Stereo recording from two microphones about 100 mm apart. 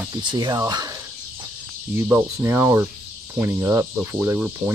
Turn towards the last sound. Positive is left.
turn(degrees=-20)  # may be behind; listen again after turning